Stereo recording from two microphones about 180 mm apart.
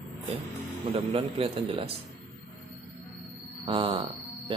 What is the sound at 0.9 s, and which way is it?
A man's voice, 35° right (ahead or behind).